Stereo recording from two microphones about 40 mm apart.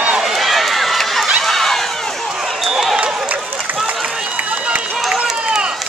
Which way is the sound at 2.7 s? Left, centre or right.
Centre.